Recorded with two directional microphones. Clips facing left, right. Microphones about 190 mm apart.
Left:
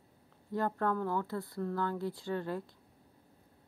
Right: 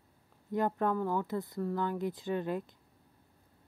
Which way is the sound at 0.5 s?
15° right (ahead or behind).